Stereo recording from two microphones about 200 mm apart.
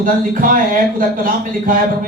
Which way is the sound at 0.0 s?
45° right (ahead or behind).